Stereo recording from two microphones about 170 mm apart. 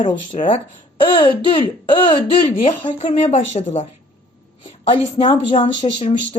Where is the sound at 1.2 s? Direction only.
30° left (ahead or behind).